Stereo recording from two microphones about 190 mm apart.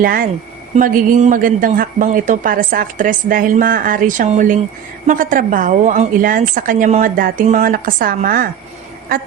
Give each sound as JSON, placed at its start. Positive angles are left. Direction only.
{"t": 0.0, "sound": "a man's voice", "side_deg": -50}